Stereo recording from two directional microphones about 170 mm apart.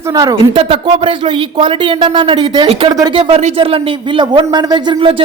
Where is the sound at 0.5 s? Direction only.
35° right (ahead or behind).